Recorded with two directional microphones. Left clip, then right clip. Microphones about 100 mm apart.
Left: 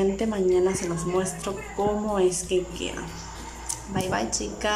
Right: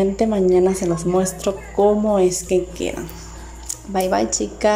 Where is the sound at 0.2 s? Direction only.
50° right (ahead or behind).